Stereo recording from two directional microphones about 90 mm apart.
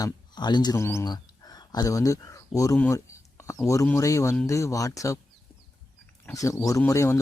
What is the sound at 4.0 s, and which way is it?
Speech, 35° left (ahead or behind).